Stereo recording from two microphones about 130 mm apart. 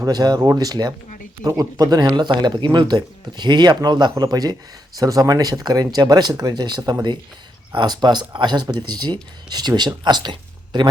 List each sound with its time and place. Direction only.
0.0 s speech: 30° right (ahead or behind)